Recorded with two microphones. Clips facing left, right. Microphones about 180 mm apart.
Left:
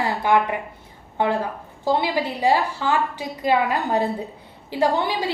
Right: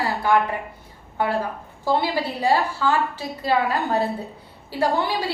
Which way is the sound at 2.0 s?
15° left (ahead or behind).